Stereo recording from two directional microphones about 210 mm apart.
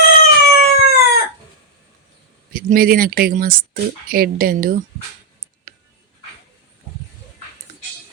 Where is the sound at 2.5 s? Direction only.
45° right (ahead or behind).